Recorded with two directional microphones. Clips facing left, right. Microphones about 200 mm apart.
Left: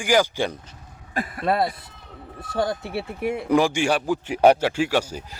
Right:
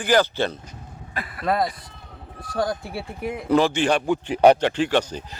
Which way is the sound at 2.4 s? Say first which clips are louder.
Even; 25° left (ahead or behind).